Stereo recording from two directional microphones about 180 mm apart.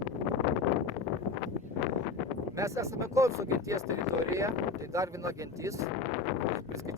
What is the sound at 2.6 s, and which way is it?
Speech, 15° right (ahead or behind).